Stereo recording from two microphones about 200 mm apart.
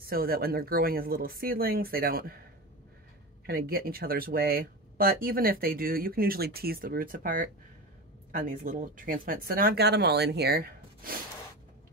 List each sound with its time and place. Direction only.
0.0 s speech: 45° right (ahead or behind)
3.4 s speech: 50° right (ahead or behind)